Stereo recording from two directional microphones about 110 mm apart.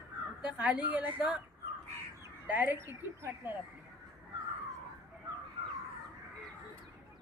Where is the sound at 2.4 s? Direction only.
15° right (ahead or behind).